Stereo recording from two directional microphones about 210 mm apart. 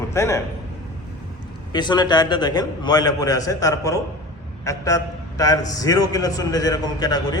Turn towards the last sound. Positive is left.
turn(degrees=20)  # may be behind; listen again after turning